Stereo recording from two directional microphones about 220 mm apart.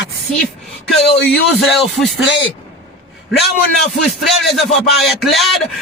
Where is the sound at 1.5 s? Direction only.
Centre (ahead or behind).